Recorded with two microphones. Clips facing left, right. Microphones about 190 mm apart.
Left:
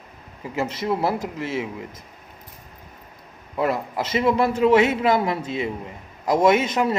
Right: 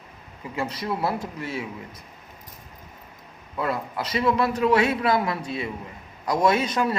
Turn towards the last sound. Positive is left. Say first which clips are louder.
# left 3 dB
turn(degrees=25)  # may be behind; listen again after turning